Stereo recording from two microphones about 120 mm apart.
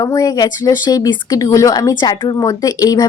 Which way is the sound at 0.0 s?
30° left (ahead or behind).